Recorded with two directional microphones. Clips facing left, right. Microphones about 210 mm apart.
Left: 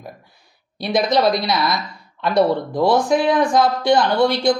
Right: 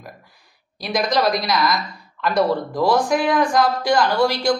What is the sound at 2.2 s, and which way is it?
Speech, 25° left (ahead or behind).